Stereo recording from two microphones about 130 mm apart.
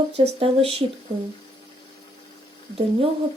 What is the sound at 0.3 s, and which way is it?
Speech, 45° right (ahead or behind).